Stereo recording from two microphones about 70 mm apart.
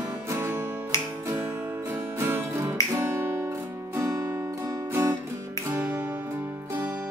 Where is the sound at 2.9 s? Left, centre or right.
Right.